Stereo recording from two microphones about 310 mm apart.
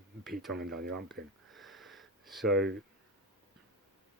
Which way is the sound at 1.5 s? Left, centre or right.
Centre.